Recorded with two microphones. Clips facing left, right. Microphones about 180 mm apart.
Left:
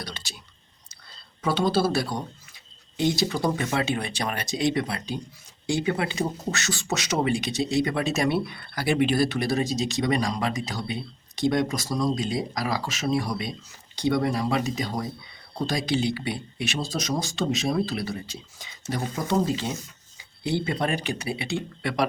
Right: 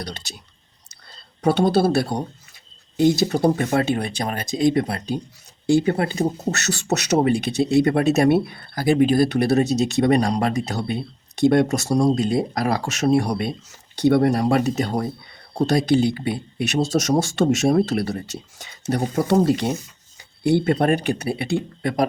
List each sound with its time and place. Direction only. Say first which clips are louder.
1.5 s speech: right 6 dB; 55° right (ahead or behind); by 6.5 s 40° right (ahead or behind)
7.2 s speech: right 5 dB; 50° right (ahead or behind)
10.3 s speech: right 6 dB; 45° right (ahead or behind)
10.7 s speech: right 6 dB; 60° right (ahead or behind)
20.5 s speech: right 8 dB; 55° right (ahead or behind)